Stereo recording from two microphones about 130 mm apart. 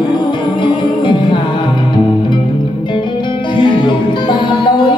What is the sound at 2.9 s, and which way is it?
Music, 35° left (ahead or behind).